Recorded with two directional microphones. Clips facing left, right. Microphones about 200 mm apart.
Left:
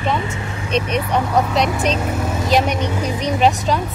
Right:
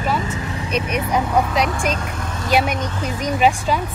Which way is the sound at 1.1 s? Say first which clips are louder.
Left 1 dB; 10° right (ahead or behind).